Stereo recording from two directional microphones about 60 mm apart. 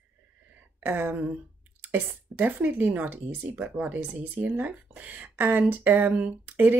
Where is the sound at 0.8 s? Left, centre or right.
Right.